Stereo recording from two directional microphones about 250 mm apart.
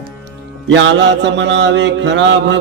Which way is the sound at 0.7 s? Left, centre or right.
Right.